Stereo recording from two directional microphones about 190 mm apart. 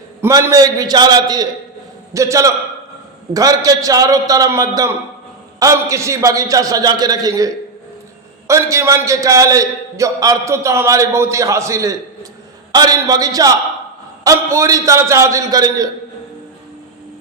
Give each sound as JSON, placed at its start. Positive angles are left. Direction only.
{"t": 0.2, "sound": "a man's voice", "side_deg": -15}